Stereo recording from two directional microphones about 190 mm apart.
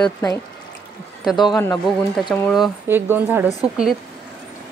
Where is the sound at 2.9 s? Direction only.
10° right (ahead or behind).